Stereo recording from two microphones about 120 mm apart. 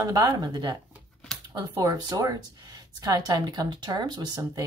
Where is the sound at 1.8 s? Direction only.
30° right (ahead or behind).